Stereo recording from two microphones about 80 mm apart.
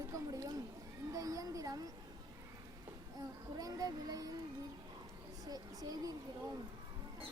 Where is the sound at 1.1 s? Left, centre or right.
Right.